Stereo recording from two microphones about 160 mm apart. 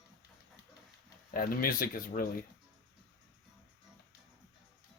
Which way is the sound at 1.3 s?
65° left (ahead or behind).